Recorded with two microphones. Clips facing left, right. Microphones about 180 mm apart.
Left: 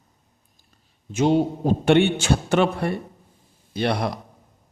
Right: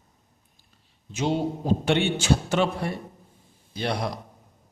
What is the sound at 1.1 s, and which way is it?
A man's voice, 55° left (ahead or behind).